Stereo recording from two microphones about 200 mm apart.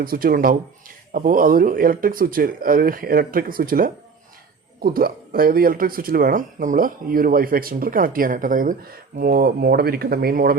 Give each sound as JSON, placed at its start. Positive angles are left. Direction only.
{"t": 0.0, "sound": "speech", "side_deg": -45}